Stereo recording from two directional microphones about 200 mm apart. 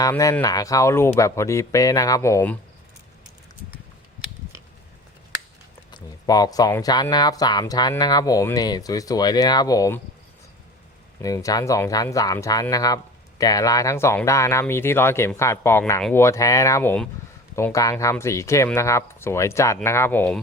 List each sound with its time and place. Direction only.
0.0 s speech: 15° left (ahead or behind)
5.9 s speech: 20° left (ahead or behind)
11.2 s speech: 15° left (ahead or behind)